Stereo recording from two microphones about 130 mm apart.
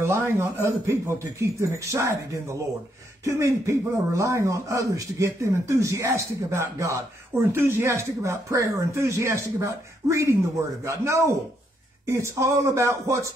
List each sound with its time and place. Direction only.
0.0 s speech: 20° right (ahead or behind)